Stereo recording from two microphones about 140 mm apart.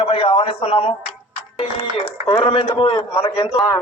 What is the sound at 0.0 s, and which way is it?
Speech, 45° left (ahead or behind).